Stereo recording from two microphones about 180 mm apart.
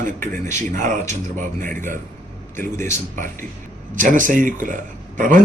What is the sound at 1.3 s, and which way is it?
Speech, 45° right (ahead or behind).